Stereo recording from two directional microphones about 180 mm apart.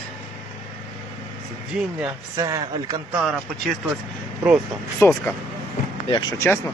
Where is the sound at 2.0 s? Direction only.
20° right (ahead or behind).